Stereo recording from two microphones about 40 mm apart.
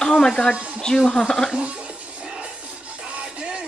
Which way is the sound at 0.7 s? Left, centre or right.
Centre.